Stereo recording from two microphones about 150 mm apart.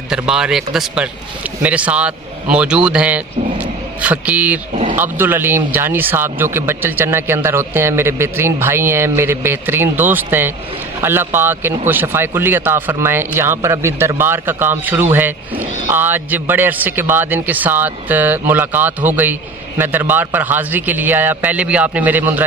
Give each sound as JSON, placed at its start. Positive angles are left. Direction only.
{"t": 0.1, "sound": "a man's voice", "side_deg": -5}